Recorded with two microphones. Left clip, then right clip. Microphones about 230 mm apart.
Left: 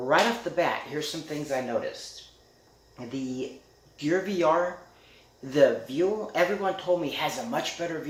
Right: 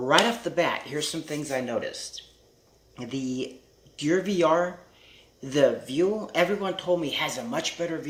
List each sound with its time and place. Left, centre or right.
0.1 s speech: right